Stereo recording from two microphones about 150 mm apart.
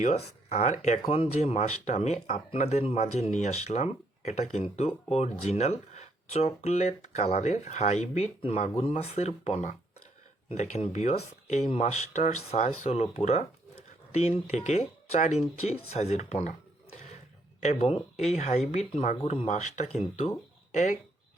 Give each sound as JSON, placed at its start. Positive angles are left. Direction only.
{"t": 0.0, "sound": "speech", "side_deg": 50}
{"t": 17.6, "sound": "speech", "side_deg": 45}